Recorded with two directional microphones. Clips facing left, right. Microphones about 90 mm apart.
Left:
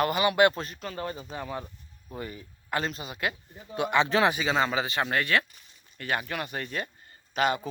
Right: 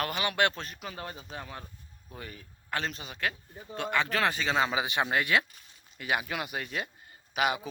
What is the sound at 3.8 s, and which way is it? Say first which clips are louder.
Speech: left 5 dB; 20° left (ahead or behind).